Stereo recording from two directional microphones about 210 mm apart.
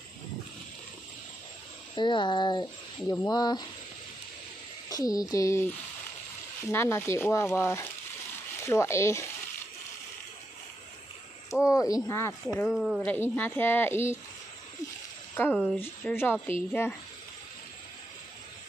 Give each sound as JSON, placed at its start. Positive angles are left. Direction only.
{"t": 2.0, "sound": "speech", "side_deg": 20}
{"t": 4.8, "sound": "speech", "side_deg": 15}
{"t": 11.6, "sound": "speech", "side_deg": 15}
{"t": 12.6, "sound": "speech", "side_deg": 0}
{"t": 15.3, "sound": "speech", "side_deg": 5}